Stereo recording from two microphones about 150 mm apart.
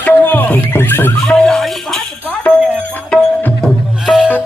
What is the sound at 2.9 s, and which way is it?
Music, 10° left (ahead or behind).